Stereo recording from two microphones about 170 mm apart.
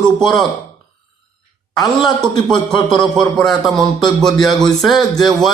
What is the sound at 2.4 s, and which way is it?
A man's voice, 5° left (ahead or behind).